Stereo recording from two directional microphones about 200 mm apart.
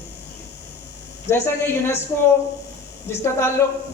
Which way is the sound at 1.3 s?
10° left (ahead or behind).